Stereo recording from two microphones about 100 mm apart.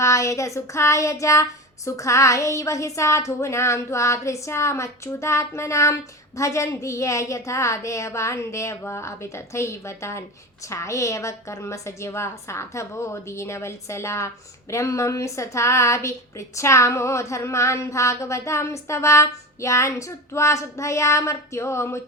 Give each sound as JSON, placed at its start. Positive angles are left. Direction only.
{"t": 0.0, "sound": "child singing", "side_deg": 30}
{"t": 10.7, "sound": "speech", "side_deg": 30}